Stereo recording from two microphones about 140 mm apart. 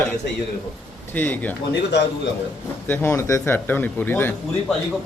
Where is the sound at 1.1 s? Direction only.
15° left (ahead or behind).